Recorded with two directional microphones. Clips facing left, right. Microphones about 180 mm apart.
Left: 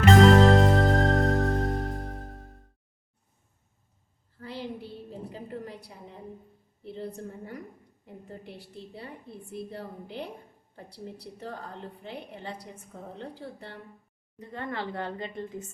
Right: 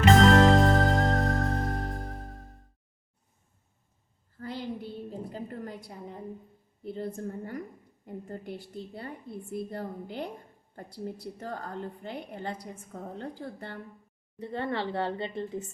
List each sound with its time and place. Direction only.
0.0 s music: centre (ahead or behind)
6.8 s a woman's voice: 45° right (ahead or behind)
14.3 s a woman's voice: 30° right (ahead or behind)